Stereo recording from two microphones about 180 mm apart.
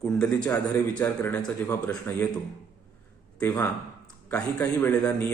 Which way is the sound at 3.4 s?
10° left (ahead or behind).